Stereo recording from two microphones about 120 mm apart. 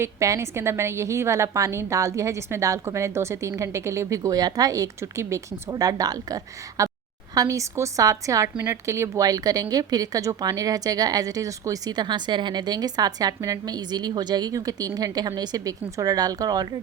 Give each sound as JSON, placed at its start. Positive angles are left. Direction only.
{"t": 0.0, "sound": "a woman's voice", "side_deg": -25}